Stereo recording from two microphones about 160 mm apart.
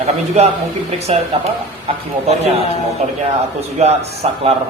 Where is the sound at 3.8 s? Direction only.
45° right (ahead or behind).